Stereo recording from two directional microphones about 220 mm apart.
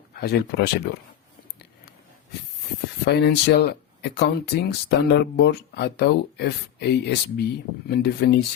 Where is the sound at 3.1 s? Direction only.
50° left (ahead or behind).